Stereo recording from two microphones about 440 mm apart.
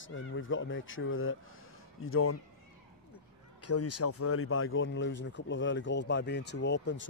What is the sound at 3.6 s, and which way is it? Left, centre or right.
Speech, left.